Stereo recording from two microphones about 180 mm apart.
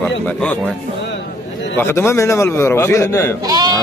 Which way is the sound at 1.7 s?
15° left (ahead or behind).